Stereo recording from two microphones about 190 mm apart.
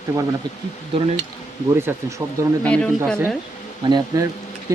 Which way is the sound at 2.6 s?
5° left (ahead or behind).